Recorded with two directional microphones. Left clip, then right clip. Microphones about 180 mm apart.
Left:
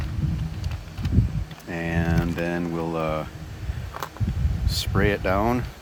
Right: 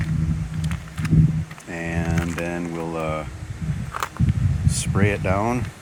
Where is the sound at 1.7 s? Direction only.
10° left (ahead or behind).